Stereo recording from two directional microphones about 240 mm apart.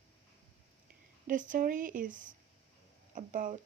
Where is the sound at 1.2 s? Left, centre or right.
Right.